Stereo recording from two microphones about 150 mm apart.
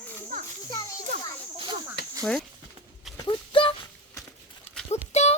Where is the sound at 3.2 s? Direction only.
30° left (ahead or behind).